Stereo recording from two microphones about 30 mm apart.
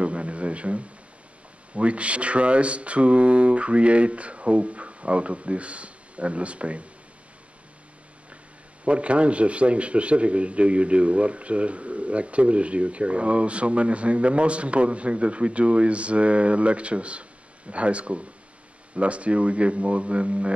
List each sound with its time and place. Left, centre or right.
0.0 s a sound: right
1.7 s speech: right
8.8 s speech: right